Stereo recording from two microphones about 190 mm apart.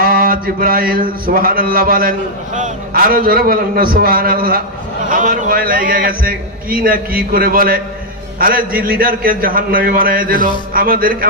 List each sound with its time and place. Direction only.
0.0 s mantra: 50° right (ahead or behind)